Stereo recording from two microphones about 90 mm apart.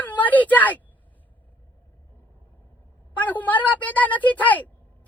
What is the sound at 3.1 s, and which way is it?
A woman's voice, 20° left (ahead or behind).